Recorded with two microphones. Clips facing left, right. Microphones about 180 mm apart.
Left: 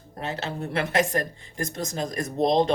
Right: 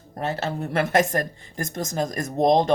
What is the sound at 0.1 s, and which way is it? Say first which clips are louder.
Speech: right 4 dB; 45° right (ahead or behind).